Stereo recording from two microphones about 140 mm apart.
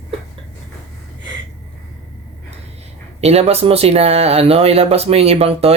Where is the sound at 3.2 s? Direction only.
45° right (ahead or behind).